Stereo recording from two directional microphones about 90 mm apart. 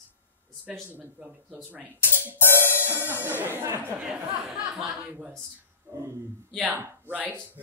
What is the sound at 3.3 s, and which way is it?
Speech, 20° right (ahead or behind).